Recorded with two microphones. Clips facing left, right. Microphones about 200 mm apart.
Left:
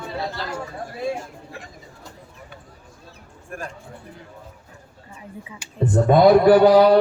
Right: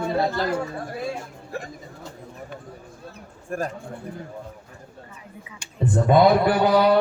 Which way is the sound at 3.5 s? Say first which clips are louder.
Right 6 dB; 40° right (ahead or behind).